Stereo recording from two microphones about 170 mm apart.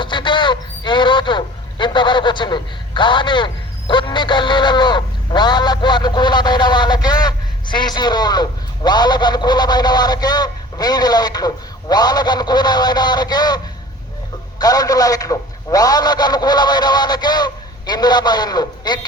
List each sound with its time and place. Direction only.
0.0 s speech: 25° left (ahead or behind)
14.6 s a man's voice: 20° left (ahead or behind)